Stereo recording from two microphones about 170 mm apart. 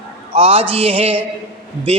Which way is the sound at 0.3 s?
35° right (ahead or behind).